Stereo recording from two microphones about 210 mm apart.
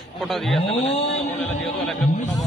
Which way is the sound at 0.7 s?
30° left (ahead or behind).